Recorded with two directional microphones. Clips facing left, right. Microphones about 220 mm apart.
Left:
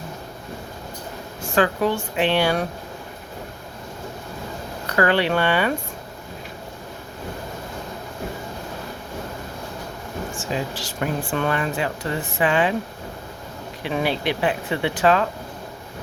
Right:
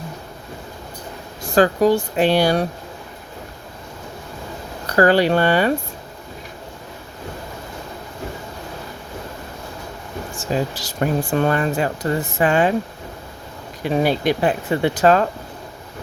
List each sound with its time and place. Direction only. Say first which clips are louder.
1.4 s speech: right 5 dB; 35° right (ahead or behind)
4.9 s speech: right 5 dB; 40° right (ahead or behind)
10.3 s speech: right 6 dB; 40° right (ahead or behind)
13.8 s speech: right 5 dB; 40° right (ahead or behind)